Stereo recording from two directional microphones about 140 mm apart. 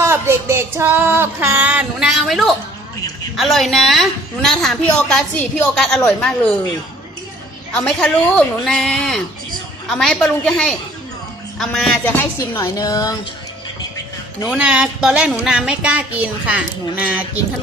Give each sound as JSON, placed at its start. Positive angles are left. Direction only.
{"t": 0.0, "sound": "female singing", "side_deg": -20}
{"t": 3.3, "sound": "a woman's voice", "side_deg": 0}
{"t": 7.8, "sound": "a woman's voice", "side_deg": 5}
{"t": 14.4, "sound": "female singing", "side_deg": -5}